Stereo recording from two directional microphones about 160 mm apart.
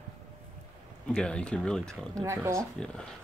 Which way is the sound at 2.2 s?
15° right (ahead or behind).